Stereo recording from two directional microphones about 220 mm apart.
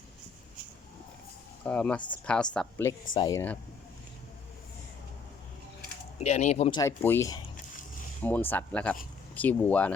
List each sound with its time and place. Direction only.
1.6 s a woman's voice: 5° left (ahead or behind)
6.1 s speech: 30° left (ahead or behind); by 9.9 s 5° left (ahead or behind)